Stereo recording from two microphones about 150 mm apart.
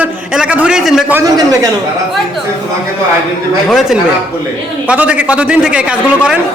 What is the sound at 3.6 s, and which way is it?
A man's voice, centre (ahead or behind).